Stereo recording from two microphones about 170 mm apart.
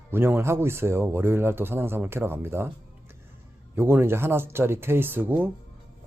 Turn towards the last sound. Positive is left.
turn(degrees=-10)  # may be behind; listen again after turning